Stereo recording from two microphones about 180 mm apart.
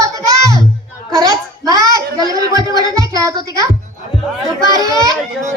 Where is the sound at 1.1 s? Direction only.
20° right (ahead or behind).